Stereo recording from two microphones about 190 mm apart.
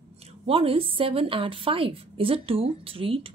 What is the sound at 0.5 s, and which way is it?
A woman's voice, 30° right (ahead or behind).